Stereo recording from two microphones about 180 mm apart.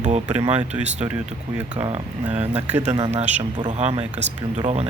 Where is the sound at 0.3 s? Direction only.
35° right (ahead or behind).